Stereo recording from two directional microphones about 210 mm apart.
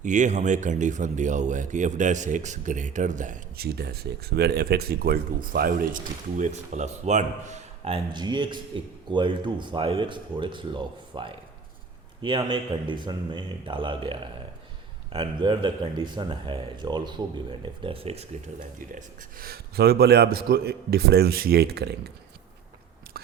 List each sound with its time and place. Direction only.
0.0 s speech: 35° right (ahead or behind)
18.8 s a man's voice: 40° right (ahead or behind)
23.1 s biting: 50° right (ahead or behind)